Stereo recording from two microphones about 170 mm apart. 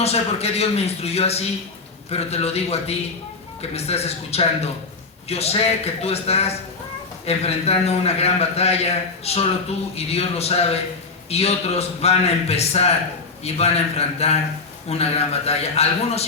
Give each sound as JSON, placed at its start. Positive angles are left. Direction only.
{"t": 0.0, "sound": "a man's voice", "side_deg": 40}